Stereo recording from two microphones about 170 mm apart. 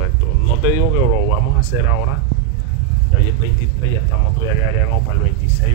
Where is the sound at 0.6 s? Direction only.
10° right (ahead or behind).